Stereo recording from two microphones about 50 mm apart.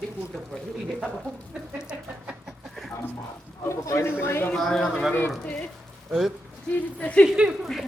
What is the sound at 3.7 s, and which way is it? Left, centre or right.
Speech, left.